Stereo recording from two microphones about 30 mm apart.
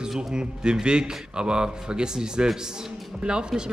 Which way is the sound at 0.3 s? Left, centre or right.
Right.